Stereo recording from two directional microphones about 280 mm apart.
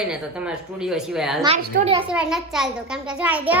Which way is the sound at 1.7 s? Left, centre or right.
Right.